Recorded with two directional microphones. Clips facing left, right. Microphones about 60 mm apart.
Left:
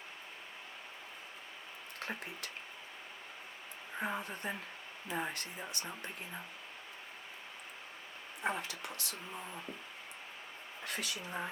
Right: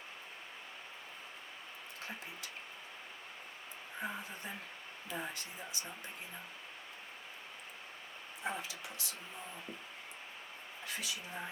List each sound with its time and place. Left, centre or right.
2.0 s speech: left
4.0 s speech: left
8.4 s speech: left
10.8 s speech: left